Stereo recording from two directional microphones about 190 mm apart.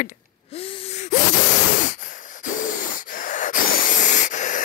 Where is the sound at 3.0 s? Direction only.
45° left (ahead or behind).